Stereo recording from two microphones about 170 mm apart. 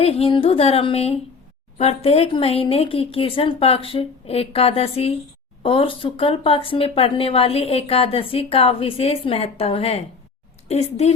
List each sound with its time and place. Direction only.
0.0 s speech: 35° left (ahead or behind)